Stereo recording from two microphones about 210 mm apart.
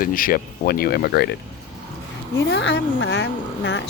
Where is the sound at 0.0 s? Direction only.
40° left (ahead or behind).